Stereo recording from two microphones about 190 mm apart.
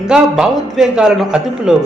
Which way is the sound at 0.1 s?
5° right (ahead or behind).